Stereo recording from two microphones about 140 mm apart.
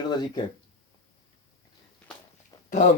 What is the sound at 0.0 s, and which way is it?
Speech, 30° left (ahead or behind).